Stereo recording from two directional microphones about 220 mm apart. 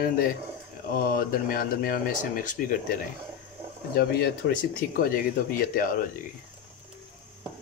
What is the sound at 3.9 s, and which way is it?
Speech, 45° left (ahead or behind).